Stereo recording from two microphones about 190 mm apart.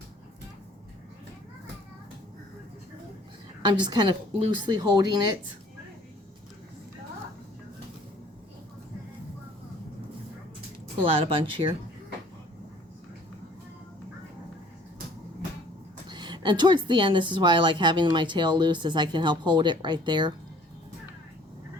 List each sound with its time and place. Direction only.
3.6 s a woman's voice: 25° right (ahead or behind)
11.0 s a woman's voice: 25° right (ahead or behind)
16.0 s a woman's voice: 25° right (ahead or behind)